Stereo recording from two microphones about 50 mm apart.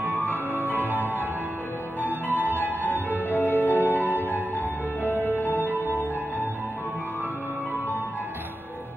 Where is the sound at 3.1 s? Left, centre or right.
Left.